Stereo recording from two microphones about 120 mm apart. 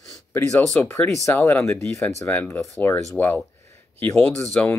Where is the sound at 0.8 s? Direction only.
20° left (ahead or behind).